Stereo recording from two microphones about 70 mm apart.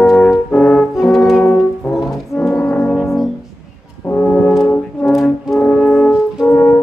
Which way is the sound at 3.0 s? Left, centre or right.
Centre.